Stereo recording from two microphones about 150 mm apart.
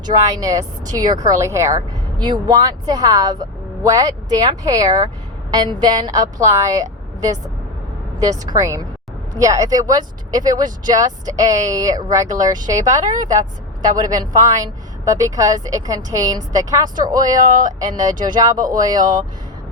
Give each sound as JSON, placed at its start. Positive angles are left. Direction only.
{"t": 0.0, "sound": "a woman's voice", "side_deg": -25}
{"t": 5.8, "sound": "a woman's voice", "side_deg": -25}